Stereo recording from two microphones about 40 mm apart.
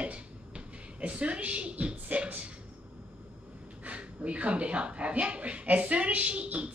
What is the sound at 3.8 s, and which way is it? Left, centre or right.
A woman's voice, right.